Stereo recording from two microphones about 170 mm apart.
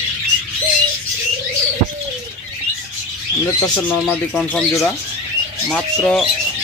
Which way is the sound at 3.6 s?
5° left (ahead or behind).